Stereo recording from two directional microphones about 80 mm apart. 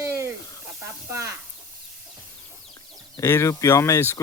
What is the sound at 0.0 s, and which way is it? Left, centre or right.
Snake, right.